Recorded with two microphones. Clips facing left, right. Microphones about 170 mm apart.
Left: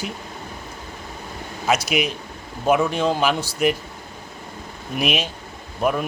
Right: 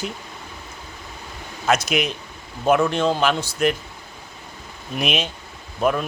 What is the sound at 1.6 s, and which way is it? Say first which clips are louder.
A man's voice: even; 10° left (ahead or behind).